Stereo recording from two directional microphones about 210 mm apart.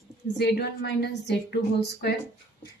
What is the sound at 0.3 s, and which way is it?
A woman's voice, 50° left (ahead or behind).